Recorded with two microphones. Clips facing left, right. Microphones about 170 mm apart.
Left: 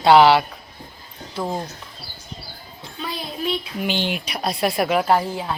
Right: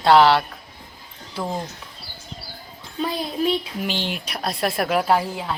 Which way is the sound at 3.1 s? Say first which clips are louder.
Right 3 dB; 40° right (ahead or behind).